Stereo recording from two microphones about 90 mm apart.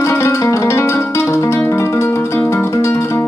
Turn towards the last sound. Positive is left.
turn(degrees=30)  # may be behind; listen again after turning